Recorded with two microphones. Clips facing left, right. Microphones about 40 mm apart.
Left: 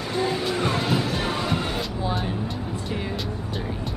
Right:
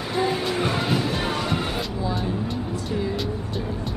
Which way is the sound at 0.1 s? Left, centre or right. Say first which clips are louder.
Right 1 dB; centre.